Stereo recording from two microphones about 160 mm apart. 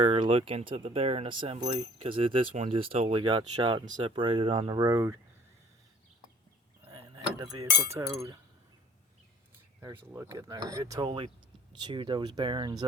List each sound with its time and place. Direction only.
0.0 s speech: 40° right (ahead or behind)
4.8 s speech: 20° right (ahead or behind)
7.9 s speech: 20° right (ahead or behind)
9.9 s speech: 15° right (ahead or behind)